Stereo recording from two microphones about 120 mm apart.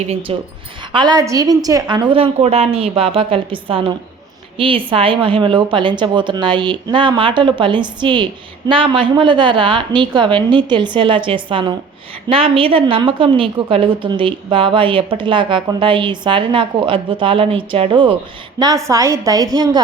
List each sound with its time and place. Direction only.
0.1 s a woman's voice: 50° right (ahead or behind)
0.9 s a woman's voice: 35° right (ahead or behind)
18.6 s a woman's voice: 25° right (ahead or behind)